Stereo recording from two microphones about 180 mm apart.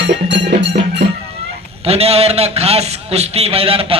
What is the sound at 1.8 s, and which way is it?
A man's voice, 35° right (ahead or behind).